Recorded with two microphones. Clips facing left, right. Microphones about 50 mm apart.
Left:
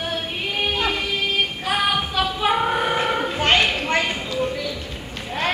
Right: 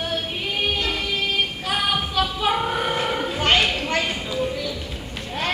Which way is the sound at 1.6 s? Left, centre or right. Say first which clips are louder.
Left 2 dB; centre.